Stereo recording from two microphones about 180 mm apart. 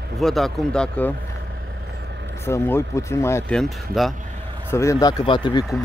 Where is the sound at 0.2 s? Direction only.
Centre (ahead or behind).